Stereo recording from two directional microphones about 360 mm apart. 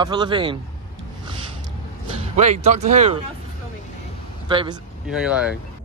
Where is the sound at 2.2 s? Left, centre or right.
Centre.